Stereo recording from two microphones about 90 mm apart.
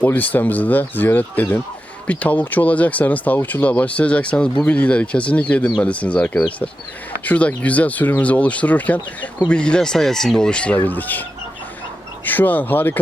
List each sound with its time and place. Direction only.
0.0 s speech: 20° left (ahead or behind)